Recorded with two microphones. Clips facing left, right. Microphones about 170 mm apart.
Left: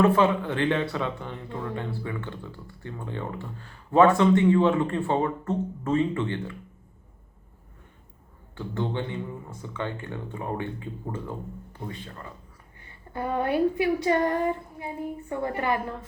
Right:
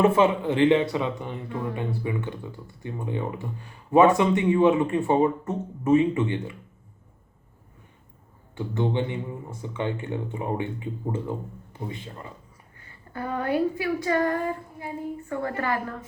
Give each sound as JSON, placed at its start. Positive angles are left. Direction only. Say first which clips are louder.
{"t": 0.0, "sound": "speech", "louder": "right 1 dB", "side_deg": -20}
{"t": 8.5, "sound": "speech", "louder": "right 4 dB", "side_deg": -15}
{"t": 12.8, "sound": "speech", "louder": "left 2 dB", "side_deg": 25}